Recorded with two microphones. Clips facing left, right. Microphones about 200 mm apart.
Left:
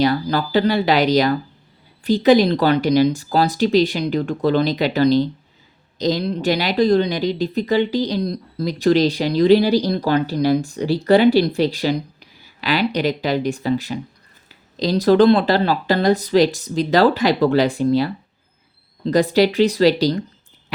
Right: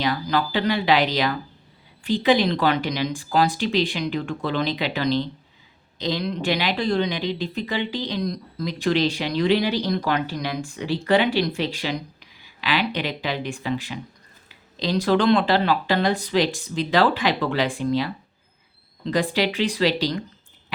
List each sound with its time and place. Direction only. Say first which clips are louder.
0.0 s speech: left 5 dB; 40° left (ahead or behind)